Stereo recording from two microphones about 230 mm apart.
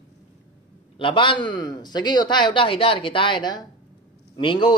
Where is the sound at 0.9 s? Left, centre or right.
Left.